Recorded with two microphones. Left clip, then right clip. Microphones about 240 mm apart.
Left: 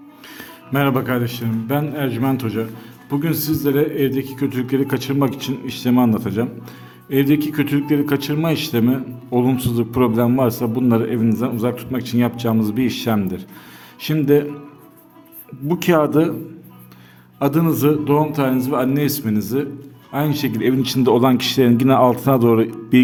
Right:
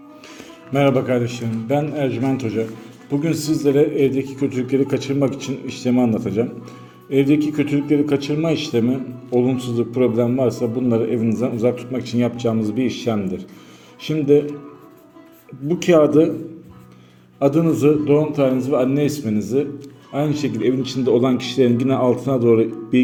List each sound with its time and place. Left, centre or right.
0.3 s a man's voice: left
15.7 s a man's voice: left
17.4 s a man's voice: left